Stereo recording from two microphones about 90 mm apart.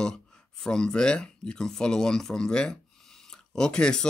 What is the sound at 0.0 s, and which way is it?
Speech, 10° left (ahead or behind).